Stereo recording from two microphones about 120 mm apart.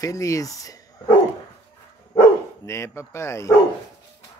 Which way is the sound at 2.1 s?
25° left (ahead or behind).